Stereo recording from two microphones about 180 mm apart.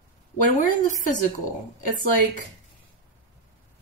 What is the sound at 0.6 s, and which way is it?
Speech, 45° left (ahead or behind).